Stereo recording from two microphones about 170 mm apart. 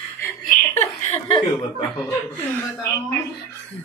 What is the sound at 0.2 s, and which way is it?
Chuckle, 15° left (ahead or behind).